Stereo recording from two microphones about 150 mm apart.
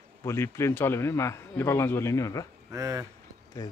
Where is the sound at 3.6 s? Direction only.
20° left (ahead or behind).